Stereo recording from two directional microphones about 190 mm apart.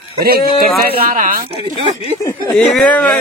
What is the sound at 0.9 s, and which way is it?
Speech, 50° right (ahead or behind).